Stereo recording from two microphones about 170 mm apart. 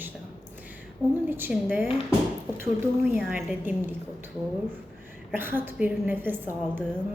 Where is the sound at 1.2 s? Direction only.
10° right (ahead or behind).